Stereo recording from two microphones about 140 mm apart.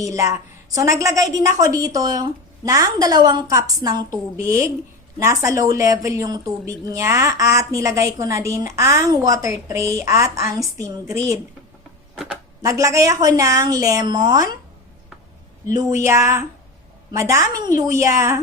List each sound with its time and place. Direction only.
0.0 s a woman's voice: 20° right (ahead or behind)
12.1 s speech: centre (ahead or behind)
12.6 s a woman's voice: 25° right (ahead or behind)
15.8 s a woman's voice: 20° right (ahead or behind)